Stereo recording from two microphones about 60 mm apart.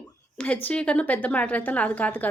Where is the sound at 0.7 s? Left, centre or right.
Left.